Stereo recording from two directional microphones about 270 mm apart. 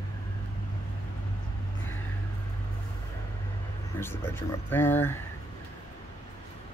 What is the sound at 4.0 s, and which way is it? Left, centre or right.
Speech, centre.